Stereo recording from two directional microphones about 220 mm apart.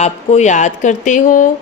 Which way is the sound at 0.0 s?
30° left (ahead or behind).